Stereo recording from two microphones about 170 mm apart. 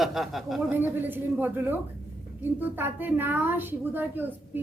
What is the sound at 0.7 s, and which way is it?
A woman's voice, 10° right (ahead or behind).